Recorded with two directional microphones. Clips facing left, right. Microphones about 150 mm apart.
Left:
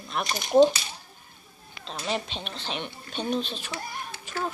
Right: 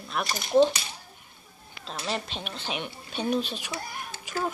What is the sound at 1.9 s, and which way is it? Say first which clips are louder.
Speech: left 2 dB; centre (ahead or behind).